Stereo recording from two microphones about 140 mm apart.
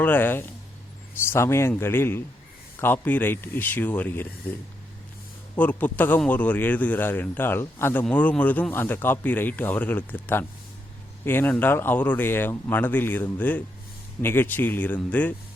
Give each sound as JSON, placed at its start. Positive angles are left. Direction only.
{"t": 0.0, "sound": "a man's voice", "side_deg": 15}
{"t": 5.5, "sound": "a man's voice", "side_deg": 10}